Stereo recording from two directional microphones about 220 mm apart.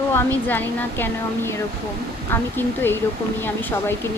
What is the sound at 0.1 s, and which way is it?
Speech, 10° left (ahead or behind).